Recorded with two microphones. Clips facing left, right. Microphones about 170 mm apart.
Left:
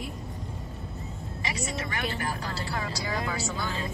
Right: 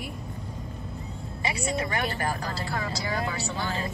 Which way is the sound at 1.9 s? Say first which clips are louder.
Right 3 dB; 45° right (ahead or behind).